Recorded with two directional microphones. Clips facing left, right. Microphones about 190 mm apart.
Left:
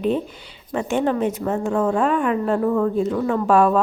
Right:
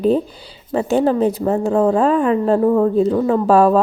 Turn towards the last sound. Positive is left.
turn(degrees=-35)  # may be behind; listen again after turning